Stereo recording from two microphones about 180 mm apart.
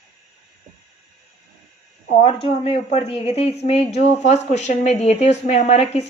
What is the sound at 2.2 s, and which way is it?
Speech, 30° left (ahead or behind).